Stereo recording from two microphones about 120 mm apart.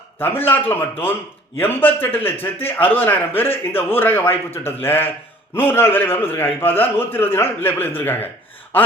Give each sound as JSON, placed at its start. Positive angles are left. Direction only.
{"t": 0.2, "sound": "a man's voice", "side_deg": 15}